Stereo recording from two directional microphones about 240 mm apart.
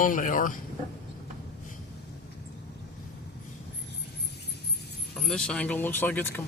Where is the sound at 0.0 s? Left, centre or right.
Left.